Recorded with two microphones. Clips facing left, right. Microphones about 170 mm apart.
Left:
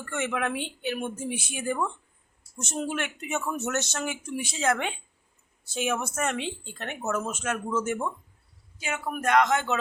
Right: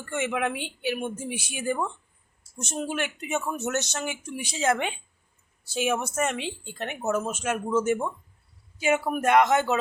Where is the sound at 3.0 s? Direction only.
30° right (ahead or behind).